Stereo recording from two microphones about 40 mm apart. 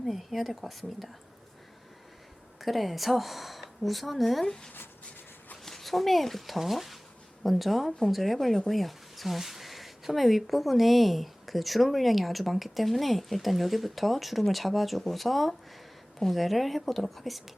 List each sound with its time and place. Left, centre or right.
0.0 s speech: centre
2.6 s speech: centre
4.4 s speech: centre